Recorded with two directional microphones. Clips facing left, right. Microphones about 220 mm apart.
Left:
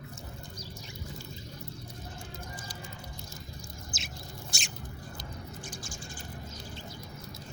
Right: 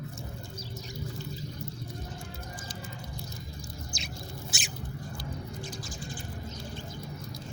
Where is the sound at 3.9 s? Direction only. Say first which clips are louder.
Right 3 dB; centre (ahead or behind).